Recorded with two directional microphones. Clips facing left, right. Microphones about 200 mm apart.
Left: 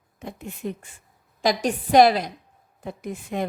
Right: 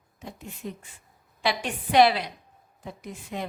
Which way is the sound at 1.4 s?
40° left (ahead or behind).